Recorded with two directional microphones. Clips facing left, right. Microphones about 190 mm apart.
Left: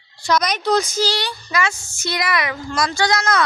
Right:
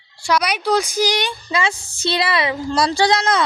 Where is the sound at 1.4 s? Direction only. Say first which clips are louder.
Right 1 dB; 30° right (ahead or behind).